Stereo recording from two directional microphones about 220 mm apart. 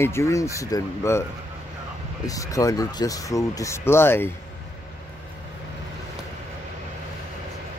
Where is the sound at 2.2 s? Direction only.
15° left (ahead or behind).